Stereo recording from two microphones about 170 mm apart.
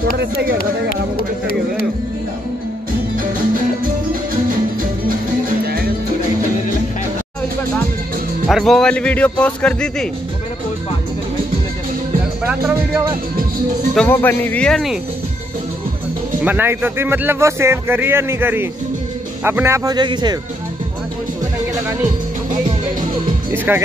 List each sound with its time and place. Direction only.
0.2 s speech: 75° right (ahead or behind)
1.1 s speech: 60° left (ahead or behind)
8.5 s speech: centre (ahead or behind)
12.4 s speech: 10° right (ahead or behind)
13.9 s speech: 10° left (ahead or behind)
16.4 s speech: 10° right (ahead or behind)
23.5 s speech: 10° right (ahead or behind)